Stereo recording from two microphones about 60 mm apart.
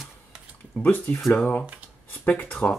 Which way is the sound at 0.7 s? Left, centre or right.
Left.